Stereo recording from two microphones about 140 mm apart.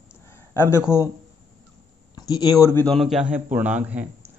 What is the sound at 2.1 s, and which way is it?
Speech, 25° left (ahead or behind).